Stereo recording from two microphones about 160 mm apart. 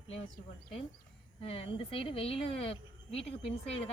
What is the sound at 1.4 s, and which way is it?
Speech, 35° left (ahead or behind).